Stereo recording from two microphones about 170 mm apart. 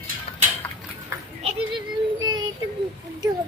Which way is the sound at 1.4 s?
35° right (ahead or behind).